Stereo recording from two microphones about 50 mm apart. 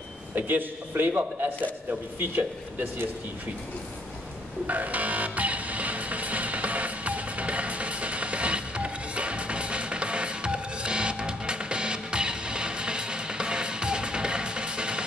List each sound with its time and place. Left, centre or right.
0.3 s a man's voice: right
4.6 s music: right